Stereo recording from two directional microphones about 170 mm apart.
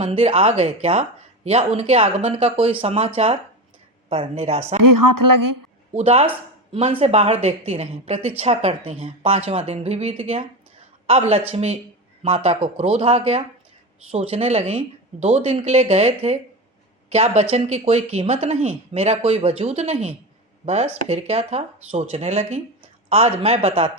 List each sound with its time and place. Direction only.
0.0 s speech: 35° right (ahead or behind)
4.1 s speech: 35° right (ahead or behind)
5.9 s speech: 35° right (ahead or behind)